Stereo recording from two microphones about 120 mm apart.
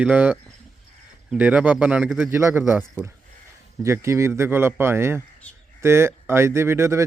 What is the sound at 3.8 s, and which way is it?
Speech, 25° right (ahead or behind).